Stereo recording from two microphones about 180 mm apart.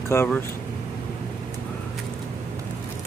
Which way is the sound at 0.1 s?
15° left (ahead or behind).